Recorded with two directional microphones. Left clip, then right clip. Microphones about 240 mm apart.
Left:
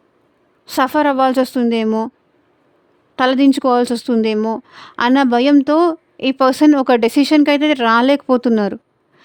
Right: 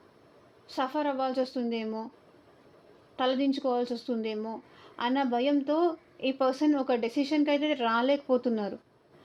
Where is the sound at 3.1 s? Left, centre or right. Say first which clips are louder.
Left 14 dB; left.